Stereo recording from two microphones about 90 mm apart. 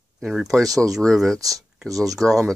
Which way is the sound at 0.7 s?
40° right (ahead or behind).